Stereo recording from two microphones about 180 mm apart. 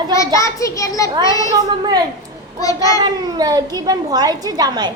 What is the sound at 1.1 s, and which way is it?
Speech, 25° right (ahead or behind).